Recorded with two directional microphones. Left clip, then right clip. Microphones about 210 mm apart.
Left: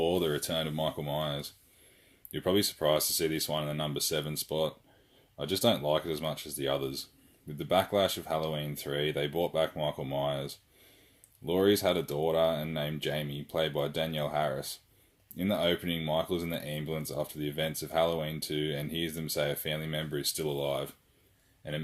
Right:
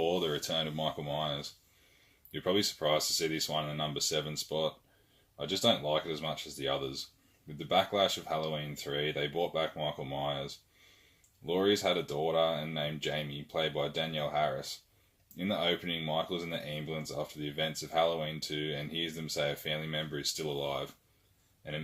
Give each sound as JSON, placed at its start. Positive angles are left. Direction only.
{"t": 0.0, "sound": "speech", "side_deg": 40}